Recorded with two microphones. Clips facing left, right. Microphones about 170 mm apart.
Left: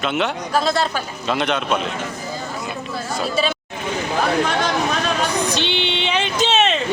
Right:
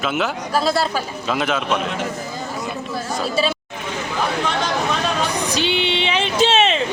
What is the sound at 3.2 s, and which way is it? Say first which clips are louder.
Speech: even; 5° right (ahead or behind).